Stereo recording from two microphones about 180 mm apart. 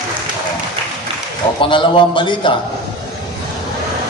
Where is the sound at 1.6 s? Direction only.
25° left (ahead or behind).